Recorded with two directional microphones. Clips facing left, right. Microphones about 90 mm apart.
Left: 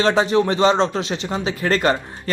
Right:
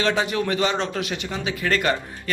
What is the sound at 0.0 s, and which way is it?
A man's voice, 30° left (ahead or behind).